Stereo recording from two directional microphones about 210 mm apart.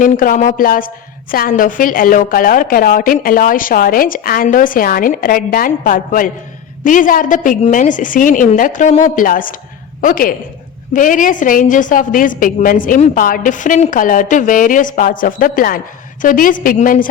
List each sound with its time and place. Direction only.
0.0 s a woman's voice: 40° left (ahead or behind)